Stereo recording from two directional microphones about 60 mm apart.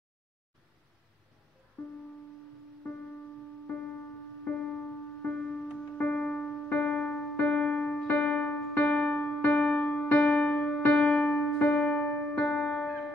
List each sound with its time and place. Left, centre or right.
4.5 s music: centre
6.7 s keyboard: centre
10.1 s music: left